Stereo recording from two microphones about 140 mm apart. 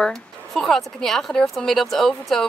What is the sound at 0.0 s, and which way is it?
Speech, 5° left (ahead or behind).